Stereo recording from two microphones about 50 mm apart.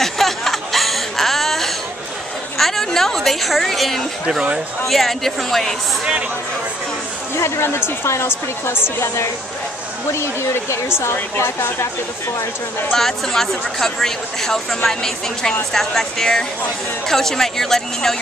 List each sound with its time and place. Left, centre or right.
0.0 s chuckle: centre
2.5 s a sound: centre
4.3 s speech: centre
4.8 s speech: centre
7.3 s a woman's voice: left
10.1 s a woman's voice: left
12.9 s speech: centre